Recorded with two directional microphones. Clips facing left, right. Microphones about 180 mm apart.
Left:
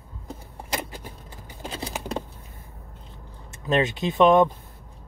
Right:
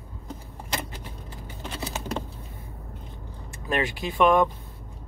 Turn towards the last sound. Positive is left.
turn(degrees=20)  # may be behind; listen again after turning